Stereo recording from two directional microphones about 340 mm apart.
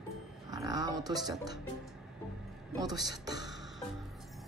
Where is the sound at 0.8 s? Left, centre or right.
Centre.